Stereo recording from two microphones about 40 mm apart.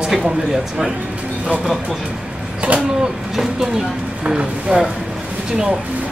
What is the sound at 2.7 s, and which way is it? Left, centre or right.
Speech, right.